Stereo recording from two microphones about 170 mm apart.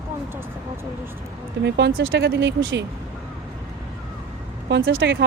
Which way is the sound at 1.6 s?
80° right.